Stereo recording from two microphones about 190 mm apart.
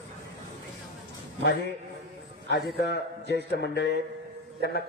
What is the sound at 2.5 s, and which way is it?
Speech, 60° left (ahead or behind).